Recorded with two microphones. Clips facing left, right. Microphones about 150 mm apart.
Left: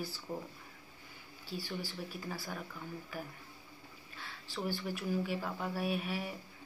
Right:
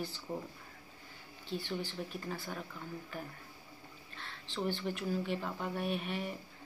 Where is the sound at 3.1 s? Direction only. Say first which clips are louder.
Even; 5° left (ahead or behind).